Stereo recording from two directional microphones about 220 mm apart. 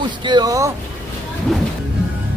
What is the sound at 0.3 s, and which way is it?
Speech, 20° right (ahead or behind).